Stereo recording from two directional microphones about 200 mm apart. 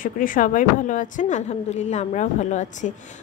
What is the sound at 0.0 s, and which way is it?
A woman's voice, 45° left (ahead or behind).